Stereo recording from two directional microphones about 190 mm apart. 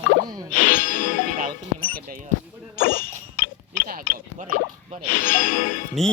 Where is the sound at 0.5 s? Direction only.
45° left (ahead or behind).